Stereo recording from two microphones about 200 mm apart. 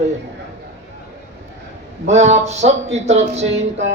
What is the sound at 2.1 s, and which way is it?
Speech, 35° right (ahead or behind).